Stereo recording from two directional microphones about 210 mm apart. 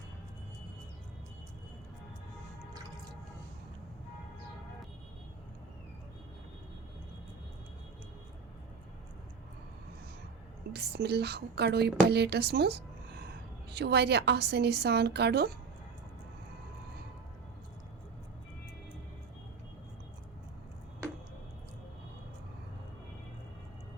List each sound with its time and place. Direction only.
10.7 s a woman's voice: 50° right (ahead or behind)